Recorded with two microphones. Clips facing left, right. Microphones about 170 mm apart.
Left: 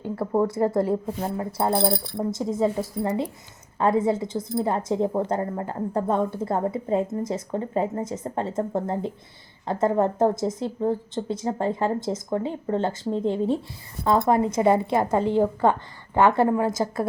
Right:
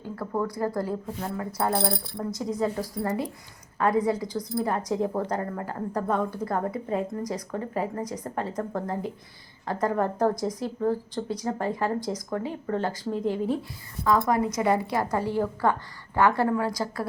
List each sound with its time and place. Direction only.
0.0 s speech: 25° left (ahead or behind)